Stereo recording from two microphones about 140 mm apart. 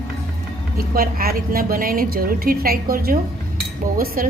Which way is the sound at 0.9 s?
90° right.